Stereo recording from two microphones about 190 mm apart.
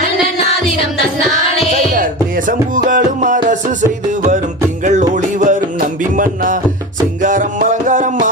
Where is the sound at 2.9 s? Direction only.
45° right (ahead or behind).